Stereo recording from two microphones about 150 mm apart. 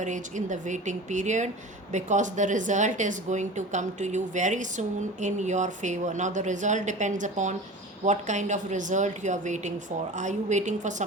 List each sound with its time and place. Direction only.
0.0 s a woman's voice: 55° right (ahead or behind)